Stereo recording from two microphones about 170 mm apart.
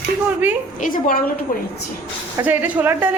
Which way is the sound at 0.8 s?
50° left (ahead or behind).